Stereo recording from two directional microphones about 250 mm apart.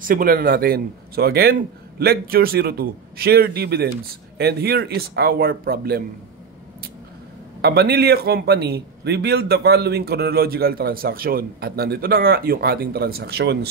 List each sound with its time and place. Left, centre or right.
0.0 s a man's voice: right
7.6 s a man's voice: right